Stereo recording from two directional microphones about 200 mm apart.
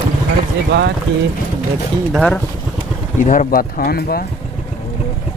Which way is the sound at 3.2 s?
40° left (ahead or behind).